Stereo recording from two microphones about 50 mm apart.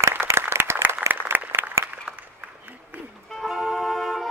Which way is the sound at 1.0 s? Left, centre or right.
Right.